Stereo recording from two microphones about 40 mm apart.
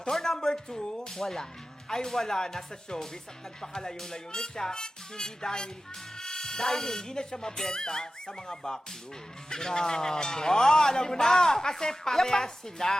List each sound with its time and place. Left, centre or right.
0.0 s speech: centre